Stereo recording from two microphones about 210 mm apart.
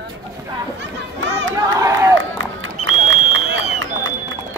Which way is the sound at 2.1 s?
70° right (ahead or behind).